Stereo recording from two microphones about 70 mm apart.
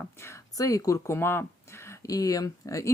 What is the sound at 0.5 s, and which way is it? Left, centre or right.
Speech, left.